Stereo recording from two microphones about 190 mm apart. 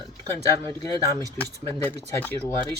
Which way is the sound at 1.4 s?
10° left (ahead or behind).